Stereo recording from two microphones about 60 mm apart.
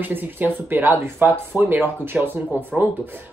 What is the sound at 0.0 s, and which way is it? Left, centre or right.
A woman's voice, right.